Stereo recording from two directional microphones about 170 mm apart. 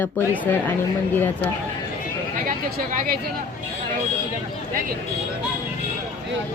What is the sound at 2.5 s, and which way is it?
Speech, 60° right (ahead or behind).